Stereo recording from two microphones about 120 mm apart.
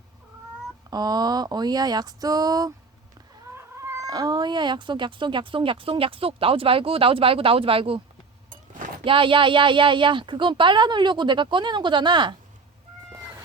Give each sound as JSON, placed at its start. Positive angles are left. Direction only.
{"t": 0.9, "sound": "speech", "side_deg": -35}
{"t": 9.0, "sound": "speech", "side_deg": -45}